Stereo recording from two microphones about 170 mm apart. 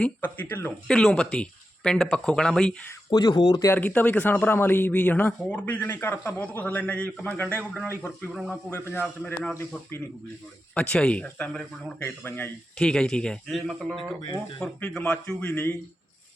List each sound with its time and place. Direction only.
0.0 s speech: 10° left (ahead or behind)
3.1 s speech: 25° left (ahead or behind)
3.7 s speech: 10° left (ahead or behind)
8.3 s speech: 5° right (ahead or behind)
8.9 s speech: 10° left (ahead or behind)
10.8 s speech: 5° left (ahead or behind)